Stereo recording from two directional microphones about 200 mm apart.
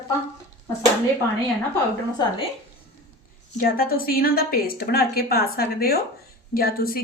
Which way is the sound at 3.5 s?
45° left (ahead or behind).